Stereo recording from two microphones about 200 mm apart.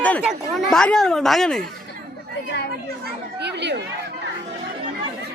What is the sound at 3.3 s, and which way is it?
Chatter, 60° right (ahead or behind).